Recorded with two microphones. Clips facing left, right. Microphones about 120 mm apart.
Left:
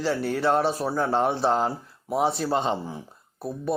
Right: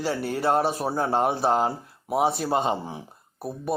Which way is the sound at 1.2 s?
10° right (ahead or behind).